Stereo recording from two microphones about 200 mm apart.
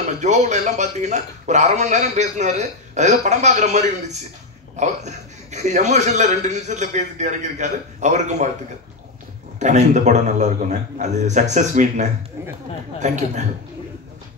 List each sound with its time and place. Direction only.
0.2 s a man's voice: 35° right (ahead or behind)
9.6 s a man's voice: 35° right (ahead or behind)